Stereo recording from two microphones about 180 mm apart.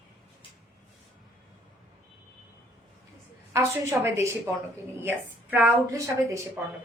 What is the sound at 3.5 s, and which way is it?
A woman's voice, 15° right (ahead or behind).